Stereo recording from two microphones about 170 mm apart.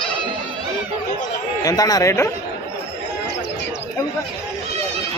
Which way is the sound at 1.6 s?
20° left (ahead or behind).